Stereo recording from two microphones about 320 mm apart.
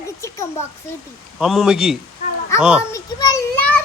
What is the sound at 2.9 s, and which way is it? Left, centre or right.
Speech, centre.